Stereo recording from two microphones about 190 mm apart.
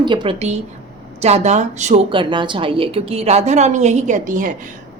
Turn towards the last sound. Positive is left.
turn(degrees=-45)  # may be behind; listen again after turning